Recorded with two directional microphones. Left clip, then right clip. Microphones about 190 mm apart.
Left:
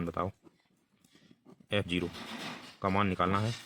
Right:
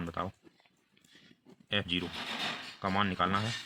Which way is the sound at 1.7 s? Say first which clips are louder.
Even; 50° left (ahead or behind).